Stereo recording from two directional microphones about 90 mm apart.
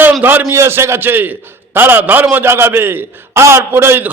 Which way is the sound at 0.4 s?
30° right (ahead or behind).